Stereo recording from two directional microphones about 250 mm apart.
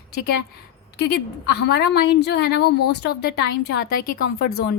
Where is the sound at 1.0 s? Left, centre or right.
Left.